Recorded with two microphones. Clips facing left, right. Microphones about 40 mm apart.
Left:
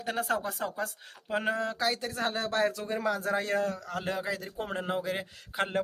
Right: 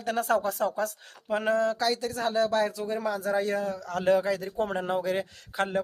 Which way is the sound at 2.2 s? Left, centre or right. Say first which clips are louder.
Right 3 dB; left.